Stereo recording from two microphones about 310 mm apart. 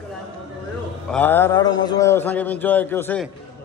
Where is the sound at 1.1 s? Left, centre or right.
Centre.